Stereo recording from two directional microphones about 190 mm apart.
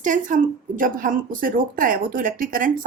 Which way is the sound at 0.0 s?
40° right (ahead or behind).